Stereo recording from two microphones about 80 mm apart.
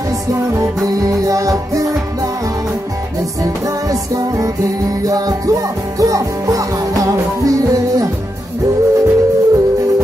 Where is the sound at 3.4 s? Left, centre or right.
Right.